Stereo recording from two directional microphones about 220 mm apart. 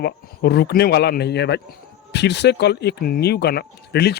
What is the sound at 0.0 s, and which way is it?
Speech, 45° left (ahead or behind).